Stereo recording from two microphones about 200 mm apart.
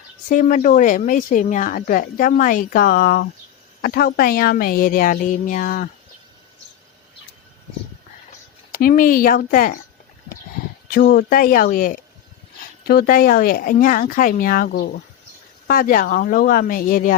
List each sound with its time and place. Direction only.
0.3 s speech: 40° left (ahead or behind)
8.7 s speech: 45° left (ahead or behind)
11.1 s speech: 45° left (ahead or behind)